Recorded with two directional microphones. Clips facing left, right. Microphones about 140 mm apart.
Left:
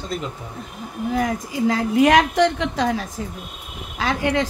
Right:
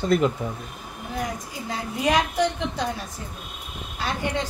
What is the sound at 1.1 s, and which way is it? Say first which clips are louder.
A woman's voice: left 7 dB; 90° left.